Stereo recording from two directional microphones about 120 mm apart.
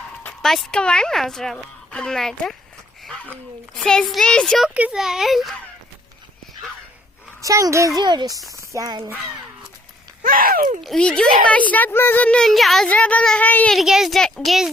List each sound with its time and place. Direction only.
0.4 s a woman's voice: 5° left (ahead or behind)
3.8 s a woman's voice: 5° left (ahead or behind)
4.7 s a woman's voice: 10° right (ahead or behind)
7.4 s a child's voice: 25° right (ahead or behind)
8.0 s a child's voice: 35° right (ahead or behind)
10.8 s a child's voice: 5° left (ahead or behind)
13.7 s a woman's voice: 5° right (ahead or behind)